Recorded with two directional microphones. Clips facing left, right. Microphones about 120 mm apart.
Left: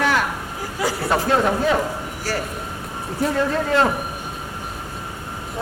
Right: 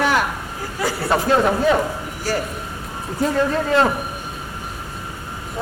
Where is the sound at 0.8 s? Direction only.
10° left (ahead or behind).